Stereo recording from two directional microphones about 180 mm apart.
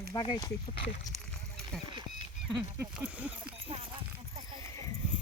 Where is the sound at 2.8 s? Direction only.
5° right (ahead or behind).